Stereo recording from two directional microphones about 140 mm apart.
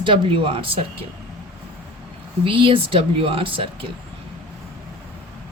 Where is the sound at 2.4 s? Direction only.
40° right (ahead or behind).